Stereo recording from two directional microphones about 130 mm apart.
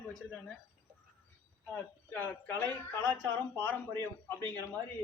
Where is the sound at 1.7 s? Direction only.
15° left (ahead or behind).